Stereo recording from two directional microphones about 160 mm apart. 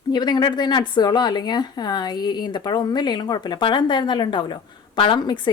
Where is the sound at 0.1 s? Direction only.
25° left (ahead or behind).